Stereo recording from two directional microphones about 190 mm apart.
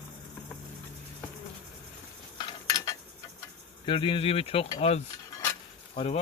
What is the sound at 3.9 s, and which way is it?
Speech, 25° left (ahead or behind).